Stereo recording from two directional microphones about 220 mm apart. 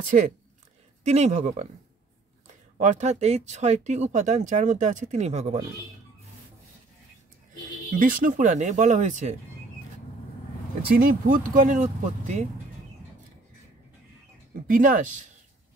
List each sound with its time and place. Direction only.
1.0 s speech: 30° right (ahead or behind)
2.8 s speech: 30° right (ahead or behind)
8.0 s speech: 40° right (ahead or behind)
11.0 s speech: 40° right (ahead or behind)
14.5 s speech: 40° right (ahead or behind)